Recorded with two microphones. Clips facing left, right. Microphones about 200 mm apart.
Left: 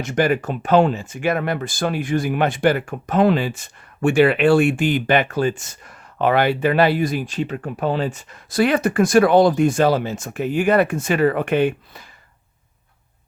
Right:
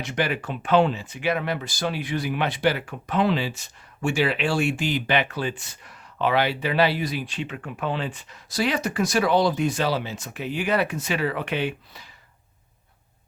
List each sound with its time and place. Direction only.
0.0 s speech: 45° left (ahead or behind)